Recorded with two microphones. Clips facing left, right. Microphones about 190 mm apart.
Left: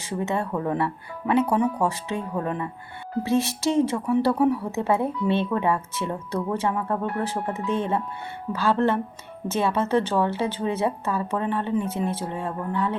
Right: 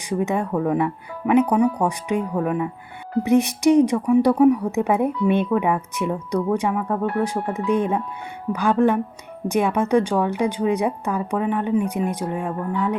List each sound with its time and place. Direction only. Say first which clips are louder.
0.1 s a woman's voice: right 4 dB; 15° right (ahead or behind)